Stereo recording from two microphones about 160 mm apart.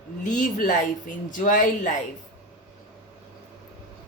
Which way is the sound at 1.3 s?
55° left (ahead or behind).